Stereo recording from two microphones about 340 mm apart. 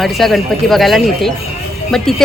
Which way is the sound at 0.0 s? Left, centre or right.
Centre.